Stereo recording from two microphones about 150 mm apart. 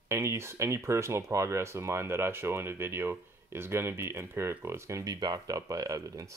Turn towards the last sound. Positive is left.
turn(degrees=-20)  # may be behind; listen again after turning